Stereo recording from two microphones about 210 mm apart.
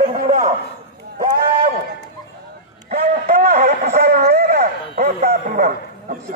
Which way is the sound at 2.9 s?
35° right (ahead or behind).